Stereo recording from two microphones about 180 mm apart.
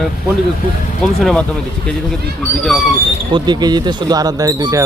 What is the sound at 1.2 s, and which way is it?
Speech, 5° left (ahead or behind).